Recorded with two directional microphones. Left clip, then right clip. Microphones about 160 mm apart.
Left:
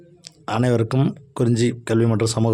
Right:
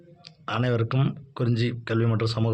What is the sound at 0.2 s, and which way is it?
Speech, 55° left (ahead or behind).